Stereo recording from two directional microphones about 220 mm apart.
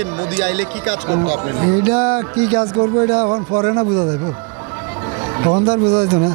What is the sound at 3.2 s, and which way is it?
Speech, 25° right (ahead or behind).